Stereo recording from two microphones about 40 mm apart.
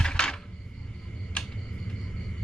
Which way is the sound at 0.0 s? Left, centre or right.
Left.